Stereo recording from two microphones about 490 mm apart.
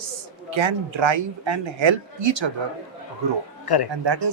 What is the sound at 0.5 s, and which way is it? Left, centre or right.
A woman's voice, right.